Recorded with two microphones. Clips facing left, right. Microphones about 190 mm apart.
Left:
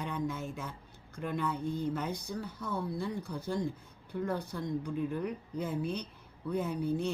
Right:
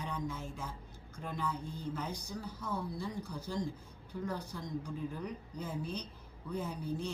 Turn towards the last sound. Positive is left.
turn(degrees=60)  # may be behind; listen again after turning